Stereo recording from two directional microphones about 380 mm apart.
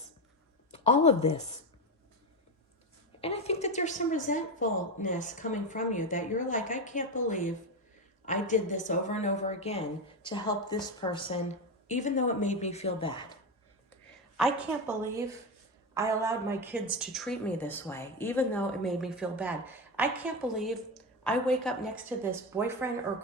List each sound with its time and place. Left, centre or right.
0.7 s a woman's voice: centre
3.2 s a woman's voice: centre
14.3 s a woman's voice: centre